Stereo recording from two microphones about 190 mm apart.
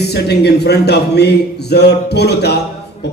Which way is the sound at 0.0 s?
60° left (ahead or behind).